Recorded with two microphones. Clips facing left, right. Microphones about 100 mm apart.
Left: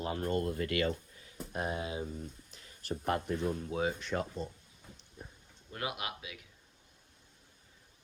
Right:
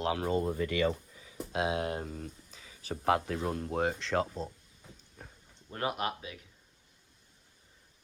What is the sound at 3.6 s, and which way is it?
Speech, 55° right (ahead or behind).